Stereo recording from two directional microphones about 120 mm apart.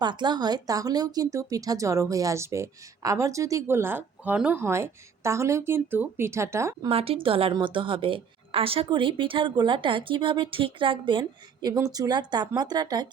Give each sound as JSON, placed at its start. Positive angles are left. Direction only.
{"t": 0.0, "sound": "a woman's voice", "side_deg": -40}
{"t": 6.8, "sound": "speech", "side_deg": -50}